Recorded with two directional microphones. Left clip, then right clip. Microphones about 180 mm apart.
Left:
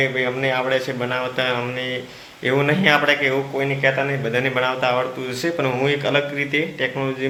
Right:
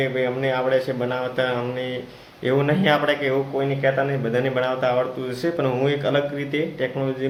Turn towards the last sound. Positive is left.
turn(degrees=-15)  # may be behind; listen again after turning